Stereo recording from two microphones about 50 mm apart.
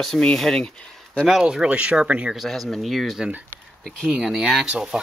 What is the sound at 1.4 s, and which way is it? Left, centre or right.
Speech, right.